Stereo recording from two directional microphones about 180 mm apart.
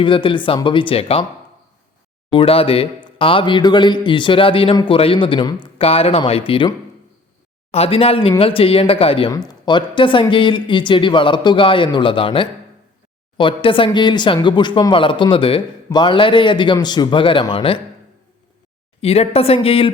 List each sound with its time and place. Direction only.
0.0 s speech: 30° left (ahead or behind)
2.3 s speech: 30° left (ahead or behind)
19.0 s speech: 35° left (ahead or behind)